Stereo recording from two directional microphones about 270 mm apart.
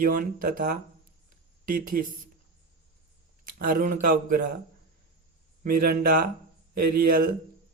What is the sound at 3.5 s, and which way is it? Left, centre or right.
Speech, right.